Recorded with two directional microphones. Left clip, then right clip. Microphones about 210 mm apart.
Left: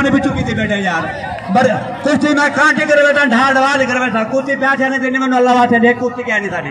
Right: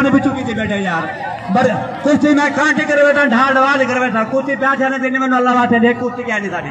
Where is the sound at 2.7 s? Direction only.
40° left (ahead or behind).